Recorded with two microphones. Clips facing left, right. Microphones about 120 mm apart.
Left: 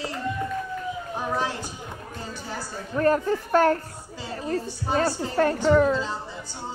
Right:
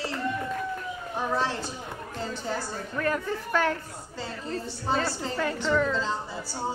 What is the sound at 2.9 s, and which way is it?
Speech, 40° left (ahead or behind).